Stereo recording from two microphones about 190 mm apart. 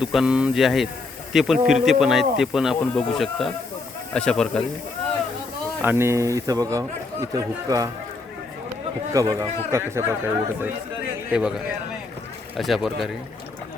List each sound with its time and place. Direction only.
0.0 s speech: 5° right (ahead or behind)
5.8 s speech: 10° right (ahead or behind)
9.4 s speech: 15° right (ahead or behind)
12.5 s speech: centre (ahead or behind)